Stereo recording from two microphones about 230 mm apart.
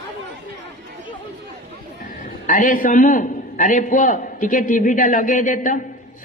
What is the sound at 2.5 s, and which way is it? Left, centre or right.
A man's voice, left.